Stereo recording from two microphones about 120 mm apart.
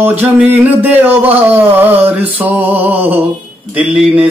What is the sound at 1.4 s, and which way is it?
Speech, 15° right (ahead or behind).